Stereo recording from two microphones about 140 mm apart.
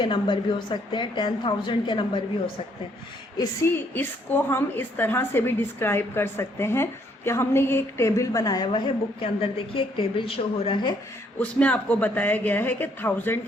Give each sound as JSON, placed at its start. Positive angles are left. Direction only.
{"t": 0.0, "sound": "a woman's voice", "side_deg": 35}
{"t": 3.9, "sound": "a woman's voice", "side_deg": 15}
{"t": 11.3, "sound": "a woman's voice", "side_deg": 10}